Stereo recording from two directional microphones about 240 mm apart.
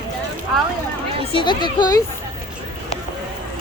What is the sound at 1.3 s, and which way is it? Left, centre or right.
Speech, centre.